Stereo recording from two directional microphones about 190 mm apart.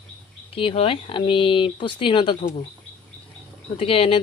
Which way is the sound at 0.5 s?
30° left (ahead or behind).